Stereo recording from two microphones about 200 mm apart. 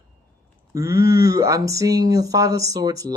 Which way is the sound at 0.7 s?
15° right (ahead or behind).